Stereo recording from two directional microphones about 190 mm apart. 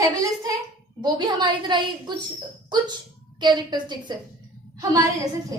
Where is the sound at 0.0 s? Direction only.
20° right (ahead or behind).